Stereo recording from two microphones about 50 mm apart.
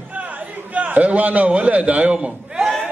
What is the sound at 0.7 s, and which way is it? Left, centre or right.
A man's voice, right.